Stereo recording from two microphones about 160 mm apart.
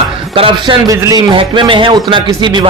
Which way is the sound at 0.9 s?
20° right (ahead or behind).